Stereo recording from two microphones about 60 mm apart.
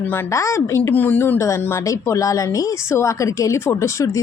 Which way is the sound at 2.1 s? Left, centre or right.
Left.